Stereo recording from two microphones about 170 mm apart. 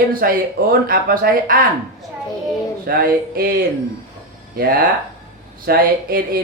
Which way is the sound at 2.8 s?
60° right (ahead or behind).